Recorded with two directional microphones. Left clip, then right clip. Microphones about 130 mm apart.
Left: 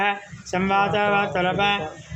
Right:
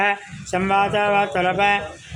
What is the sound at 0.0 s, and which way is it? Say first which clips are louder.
Speech: right 3 dB; 40° right (ahead or behind).